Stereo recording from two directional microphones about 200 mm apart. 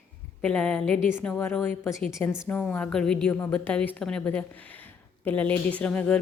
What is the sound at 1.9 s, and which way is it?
A woman's voice, centre (ahead or behind).